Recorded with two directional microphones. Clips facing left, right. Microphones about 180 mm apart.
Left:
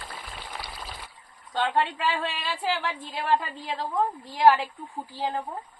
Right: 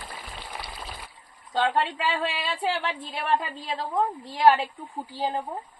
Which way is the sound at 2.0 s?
20° right (ahead or behind).